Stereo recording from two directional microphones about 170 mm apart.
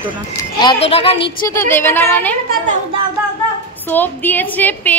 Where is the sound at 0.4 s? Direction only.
25° left (ahead or behind).